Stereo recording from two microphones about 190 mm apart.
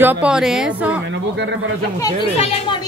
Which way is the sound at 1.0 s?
70° right (ahead or behind).